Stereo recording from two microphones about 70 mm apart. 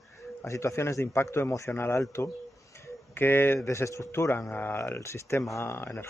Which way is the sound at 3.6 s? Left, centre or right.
Left.